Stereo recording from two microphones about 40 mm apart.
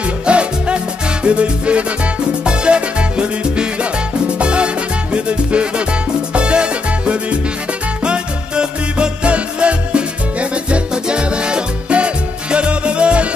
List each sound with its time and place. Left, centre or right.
0.0 s music: right